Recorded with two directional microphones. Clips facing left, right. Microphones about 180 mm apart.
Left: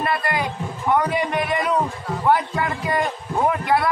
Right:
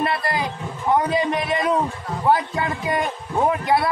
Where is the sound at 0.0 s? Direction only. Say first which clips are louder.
Even; 30° right (ahead or behind).